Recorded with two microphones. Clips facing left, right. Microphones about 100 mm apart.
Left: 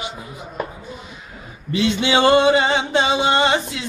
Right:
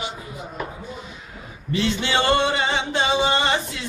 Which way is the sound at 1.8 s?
15° left (ahead or behind).